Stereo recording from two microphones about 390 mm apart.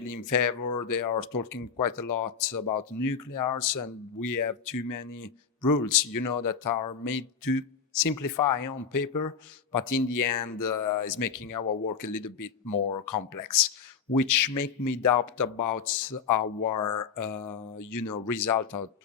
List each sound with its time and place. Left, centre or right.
0.0 s speech: left